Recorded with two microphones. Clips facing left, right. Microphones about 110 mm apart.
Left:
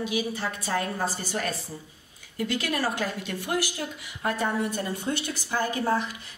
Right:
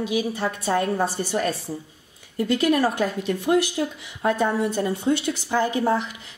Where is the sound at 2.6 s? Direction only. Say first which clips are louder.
Right 10 dB; 20° right (ahead or behind).